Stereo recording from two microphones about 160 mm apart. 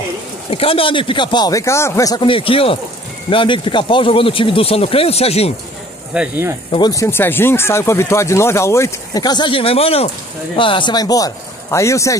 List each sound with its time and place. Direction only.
0.5 s speech: 35° left (ahead or behind)
2.2 s speech: 35° left (ahead or behind)
6.1 s speech: 10° right (ahead or behind)
6.7 s speech: 25° left (ahead or behind)